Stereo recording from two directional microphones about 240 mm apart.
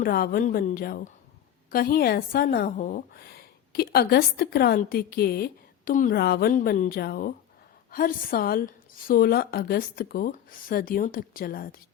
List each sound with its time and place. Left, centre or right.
0.0 s a woman's voice: left